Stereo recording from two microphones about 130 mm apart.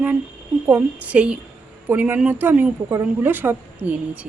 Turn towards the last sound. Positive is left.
turn(degrees=-10)  # may be behind; listen again after turning